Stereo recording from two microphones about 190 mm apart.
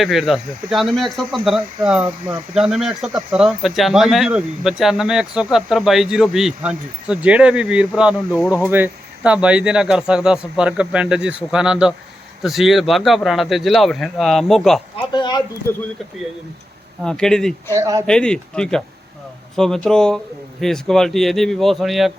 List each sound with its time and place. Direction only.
0.0 s speech: centre (ahead or behind)
15.1 s speech: 25° left (ahead or behind)
17.0 s speech: 5° left (ahead or behind)
17.7 s speech: 15° right (ahead or behind)
18.0 s speech: 5° left (ahead or behind)